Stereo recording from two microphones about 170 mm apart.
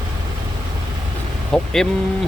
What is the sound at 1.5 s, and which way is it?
Speech, 5° left (ahead or behind).